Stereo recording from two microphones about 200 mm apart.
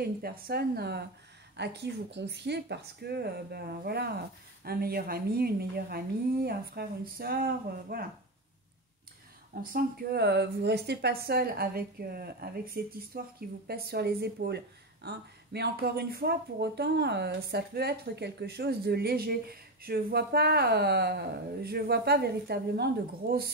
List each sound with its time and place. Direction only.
0.0 s speech: 50° right (ahead or behind)
9.7 s speech: 50° right (ahead or behind)